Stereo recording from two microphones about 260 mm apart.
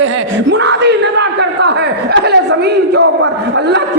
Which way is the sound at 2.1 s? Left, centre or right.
Right.